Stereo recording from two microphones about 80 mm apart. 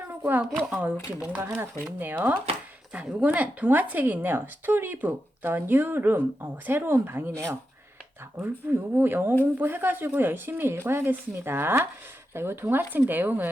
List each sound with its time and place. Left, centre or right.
0.1 s a sound: right
0.6 s speech: centre
1.4 s speech: right